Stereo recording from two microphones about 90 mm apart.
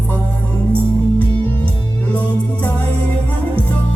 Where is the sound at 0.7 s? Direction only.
20° left (ahead or behind).